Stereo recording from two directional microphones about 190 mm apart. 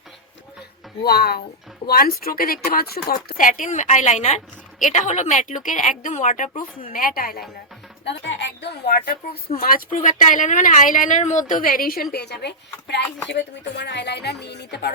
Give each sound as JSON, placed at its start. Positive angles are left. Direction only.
{"t": 1.0, "sound": "a woman's voice", "side_deg": 55}
{"t": 6.8, "sound": "speech", "side_deg": 50}
{"t": 8.0, "sound": "a woman's voice", "side_deg": 70}